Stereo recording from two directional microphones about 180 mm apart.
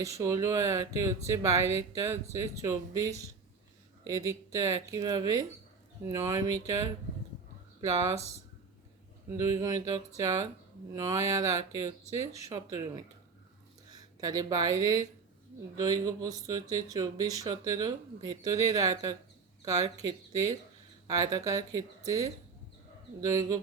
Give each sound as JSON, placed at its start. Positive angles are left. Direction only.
{"t": 0.0, "sound": "speech", "side_deg": -20}
{"t": 9.4, "sound": "speech", "side_deg": -15}
{"t": 13.9, "sound": "speech", "side_deg": -20}